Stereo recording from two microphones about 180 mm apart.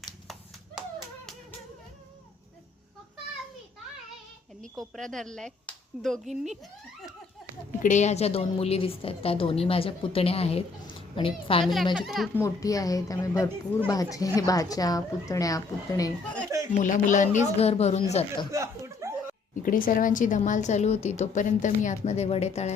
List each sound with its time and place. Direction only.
0.8 s clapping: centre (ahead or behind)
4.9 s speech: centre (ahead or behind)
7.8 s a woman's voice: 45° left (ahead or behind)
11.6 s speech: centre (ahead or behind)
12.4 s a woman's voice: 20° left (ahead or behind)
16.7 s a woman's voice: 45° left (ahead or behind)
18.5 s chuckle: 15° right (ahead or behind)
19.6 s a woman's voice: 50° left (ahead or behind)